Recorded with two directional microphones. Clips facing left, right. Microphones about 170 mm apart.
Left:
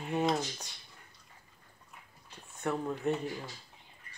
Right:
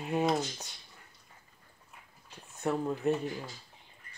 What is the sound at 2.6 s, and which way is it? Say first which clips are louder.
Speech: right 2 dB; 5° right (ahead or behind).